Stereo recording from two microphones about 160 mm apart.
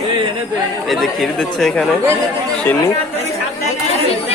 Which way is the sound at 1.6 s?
5° left (ahead or behind).